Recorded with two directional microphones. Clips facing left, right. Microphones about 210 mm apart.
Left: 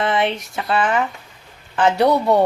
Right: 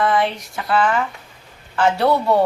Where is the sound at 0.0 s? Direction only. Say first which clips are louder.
Right 1 dB; 25° left (ahead or behind).